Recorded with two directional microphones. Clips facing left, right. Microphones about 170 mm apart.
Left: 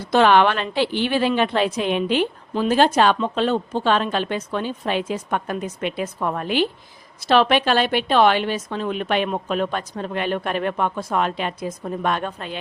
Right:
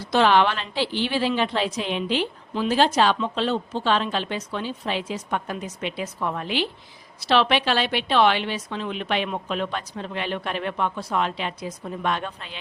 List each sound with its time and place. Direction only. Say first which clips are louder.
0.0 s a woman's voice: left 3 dB; 55° left (ahead or behind)